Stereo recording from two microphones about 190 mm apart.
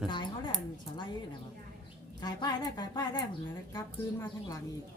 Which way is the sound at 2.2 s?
20° left (ahead or behind).